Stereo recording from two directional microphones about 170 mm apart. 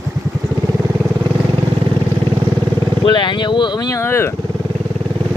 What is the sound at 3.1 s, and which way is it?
Speech, 25° left (ahead or behind).